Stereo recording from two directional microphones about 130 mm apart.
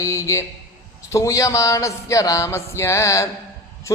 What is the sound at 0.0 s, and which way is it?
A man's voice, 25° left (ahead or behind).